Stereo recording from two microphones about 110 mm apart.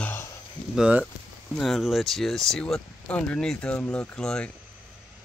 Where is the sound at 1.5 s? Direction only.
Centre (ahead or behind).